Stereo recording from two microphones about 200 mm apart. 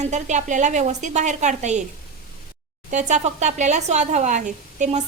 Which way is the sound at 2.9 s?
35° right (ahead or behind).